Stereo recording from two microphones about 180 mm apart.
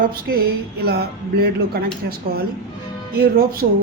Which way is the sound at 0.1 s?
55° right (ahead or behind).